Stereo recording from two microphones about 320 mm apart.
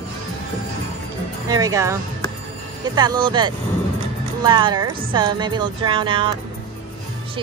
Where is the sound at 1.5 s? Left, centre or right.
Centre.